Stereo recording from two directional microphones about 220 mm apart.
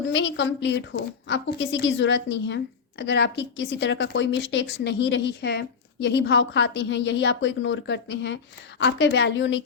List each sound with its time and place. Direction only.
0.1 s a woman's voice: 55° left (ahead or behind)